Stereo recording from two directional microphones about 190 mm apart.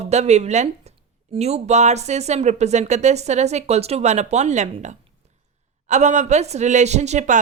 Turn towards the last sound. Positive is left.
turn(degrees=-40)  # may be behind; listen again after turning